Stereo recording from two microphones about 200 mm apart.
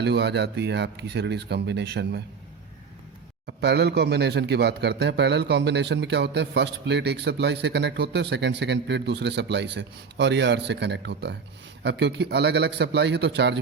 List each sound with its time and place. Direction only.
0.0 s speech: 55° right (ahead or behind)
3.4 s speech: 55° right (ahead or behind)